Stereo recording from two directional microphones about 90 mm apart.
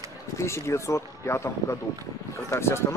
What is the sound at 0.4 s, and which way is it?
Speech, 30° left (ahead or behind).